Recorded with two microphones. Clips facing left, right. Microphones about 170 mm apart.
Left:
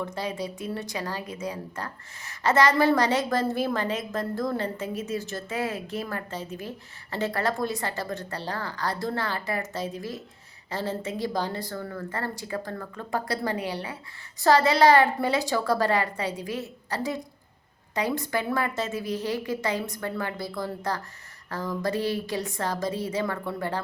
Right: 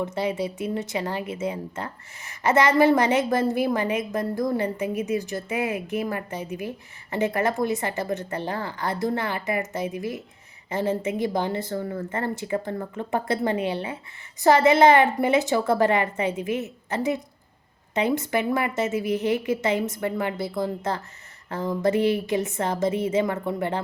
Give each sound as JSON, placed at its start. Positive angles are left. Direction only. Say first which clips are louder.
{"t": 0.0, "sound": "speech", "louder": "right 5 dB", "side_deg": -20}